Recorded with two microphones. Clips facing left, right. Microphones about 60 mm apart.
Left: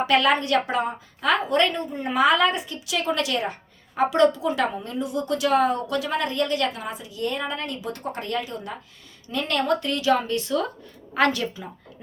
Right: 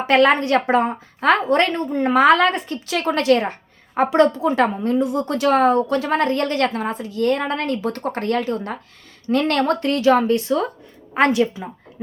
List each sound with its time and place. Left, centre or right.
0.1 s a woman's voice: right